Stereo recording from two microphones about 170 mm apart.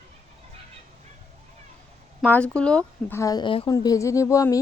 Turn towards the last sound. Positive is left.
turn(degrees=20)  # may be behind; listen again after turning